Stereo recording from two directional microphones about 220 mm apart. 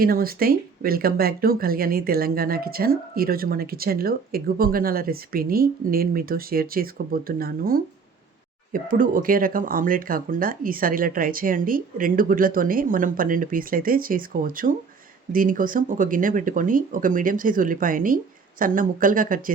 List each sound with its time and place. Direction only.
0.0 s speech: 40° right (ahead or behind)